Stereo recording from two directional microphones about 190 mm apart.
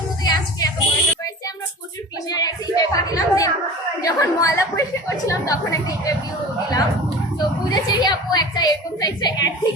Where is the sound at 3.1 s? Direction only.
20° left (ahead or behind).